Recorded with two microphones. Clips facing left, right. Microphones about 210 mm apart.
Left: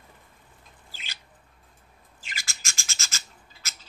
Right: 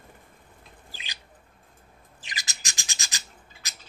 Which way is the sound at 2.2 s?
20° right (ahead or behind).